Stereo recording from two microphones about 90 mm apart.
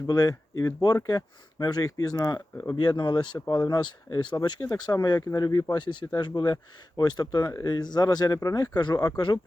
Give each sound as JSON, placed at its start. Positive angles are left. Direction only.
{"t": 0.1, "sound": "speech", "side_deg": 50}
{"t": 2.6, "sound": "speech", "side_deg": 60}
{"t": 4.4, "sound": "speech", "side_deg": 45}
{"t": 5.7, "sound": "speech", "side_deg": 65}